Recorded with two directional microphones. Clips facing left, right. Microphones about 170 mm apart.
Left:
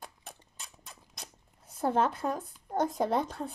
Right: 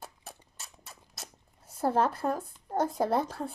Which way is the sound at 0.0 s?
5° right (ahead or behind).